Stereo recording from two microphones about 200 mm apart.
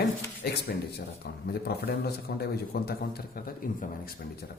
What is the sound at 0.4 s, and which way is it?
A man's voice, 55° left (ahead or behind).